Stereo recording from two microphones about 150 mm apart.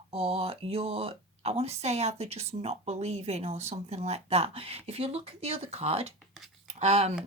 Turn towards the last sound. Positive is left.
turn(degrees=-45)  # may be behind; listen again after turning